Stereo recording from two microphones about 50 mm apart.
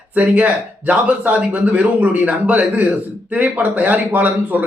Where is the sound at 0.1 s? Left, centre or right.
Right.